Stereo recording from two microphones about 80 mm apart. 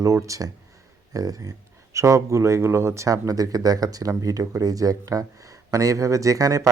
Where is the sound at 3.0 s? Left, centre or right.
Right.